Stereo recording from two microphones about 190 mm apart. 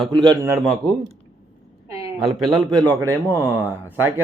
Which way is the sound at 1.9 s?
15° right (ahead or behind).